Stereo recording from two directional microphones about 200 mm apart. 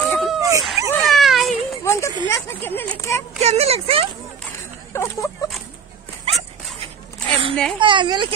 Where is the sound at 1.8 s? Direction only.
15° left (ahead or behind).